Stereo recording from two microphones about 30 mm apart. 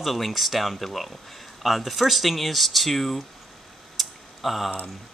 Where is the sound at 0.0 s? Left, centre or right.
Centre.